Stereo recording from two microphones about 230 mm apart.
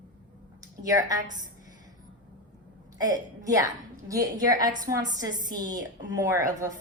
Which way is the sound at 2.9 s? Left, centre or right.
Centre.